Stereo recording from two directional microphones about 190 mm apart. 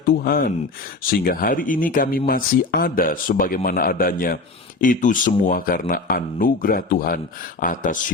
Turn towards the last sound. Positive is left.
turn(degrees=45)  # may be behind; listen again after turning